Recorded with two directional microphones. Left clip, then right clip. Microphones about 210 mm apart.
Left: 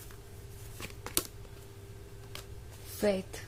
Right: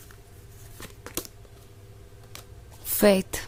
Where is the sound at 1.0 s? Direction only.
5° right (ahead or behind).